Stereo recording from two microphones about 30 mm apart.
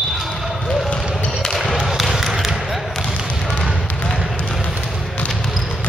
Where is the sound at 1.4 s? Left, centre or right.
Centre.